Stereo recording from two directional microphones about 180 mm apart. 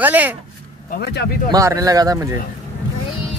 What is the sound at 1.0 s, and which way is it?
Speech, 65° left (ahead or behind).